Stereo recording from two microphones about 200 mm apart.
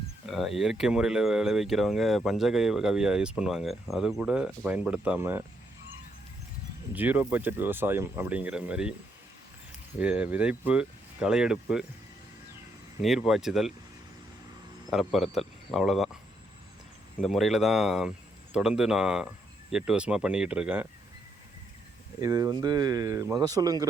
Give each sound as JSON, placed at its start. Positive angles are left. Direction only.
{"t": 0.3, "sound": "speech", "side_deg": 0}
{"t": 6.9, "sound": "speech", "side_deg": -10}
{"t": 10.0, "sound": "speech", "side_deg": -5}
{"t": 13.0, "sound": "speech", "side_deg": 0}
{"t": 14.8, "sound": "speech", "side_deg": 0}
{"t": 17.2, "sound": "speech", "side_deg": 0}
{"t": 22.2, "sound": "speech", "side_deg": -20}